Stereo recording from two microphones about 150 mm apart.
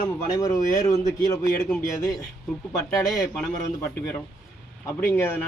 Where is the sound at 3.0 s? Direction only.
25° left (ahead or behind).